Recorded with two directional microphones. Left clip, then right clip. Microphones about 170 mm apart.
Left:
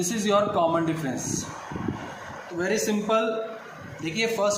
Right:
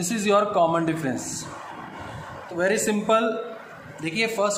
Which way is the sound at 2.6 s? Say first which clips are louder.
Right 3 dB; 50° right (ahead or behind).